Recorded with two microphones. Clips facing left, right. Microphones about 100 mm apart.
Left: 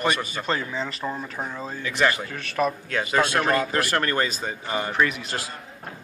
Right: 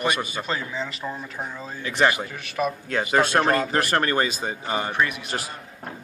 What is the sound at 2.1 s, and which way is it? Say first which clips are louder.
Speech: right 1 dB; 20° right (ahead or behind).